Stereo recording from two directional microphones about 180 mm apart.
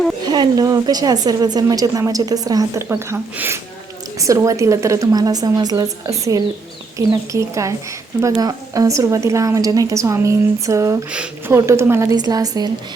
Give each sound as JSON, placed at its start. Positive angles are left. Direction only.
{"t": 0.3, "sound": "a woman's voice", "side_deg": -20}
{"t": 7.1, "sound": "a woman's voice", "side_deg": -15}